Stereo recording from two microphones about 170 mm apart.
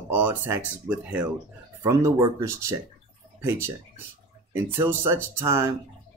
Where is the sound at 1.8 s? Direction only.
15° right (ahead or behind).